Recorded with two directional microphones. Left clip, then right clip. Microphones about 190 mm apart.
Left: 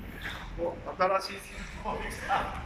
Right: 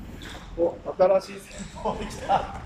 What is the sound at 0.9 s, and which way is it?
Speech, 40° right (ahead or behind).